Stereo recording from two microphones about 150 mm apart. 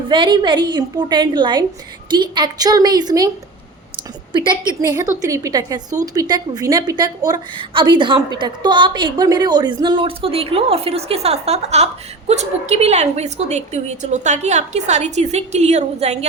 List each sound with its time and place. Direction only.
0.1 s a woman's voice: 30° right (ahead or behind)
4.3 s a woman's voice: 30° right (ahead or behind); by 16.1 s 45° right (ahead or behind)